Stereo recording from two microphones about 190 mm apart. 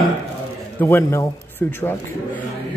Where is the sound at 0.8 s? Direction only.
10° left (ahead or behind).